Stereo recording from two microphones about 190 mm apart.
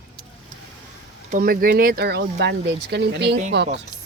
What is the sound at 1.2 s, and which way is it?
Speech, 45° right (ahead or behind).